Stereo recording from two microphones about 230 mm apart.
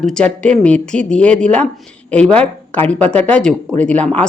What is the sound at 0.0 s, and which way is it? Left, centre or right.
Speech, centre.